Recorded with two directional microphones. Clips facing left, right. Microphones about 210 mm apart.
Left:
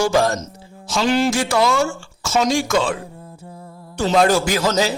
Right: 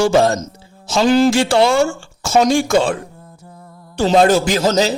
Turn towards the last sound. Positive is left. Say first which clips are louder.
# right 3 dB
turn(degrees=-25)  # may be behind; listen again after turning